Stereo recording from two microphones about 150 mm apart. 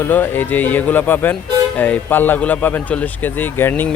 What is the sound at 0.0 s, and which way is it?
Speech, 10° left (ahead or behind).